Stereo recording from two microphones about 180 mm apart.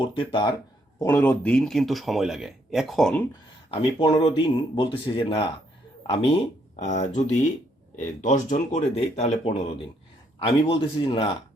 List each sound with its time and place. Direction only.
0.0 s speech: 30° left (ahead or behind)
0.9 s speech: 15° left (ahead or behind)
3.7 s speech: 30° left (ahead or behind)
6.7 s speech: 40° left (ahead or behind)